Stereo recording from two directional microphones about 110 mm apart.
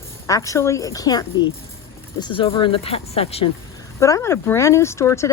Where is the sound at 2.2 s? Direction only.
50° left (ahead or behind).